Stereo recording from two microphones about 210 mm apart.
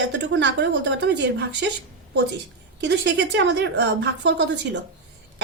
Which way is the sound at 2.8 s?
55° right (ahead or behind).